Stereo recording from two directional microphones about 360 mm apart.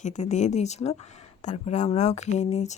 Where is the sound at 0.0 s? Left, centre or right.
Centre.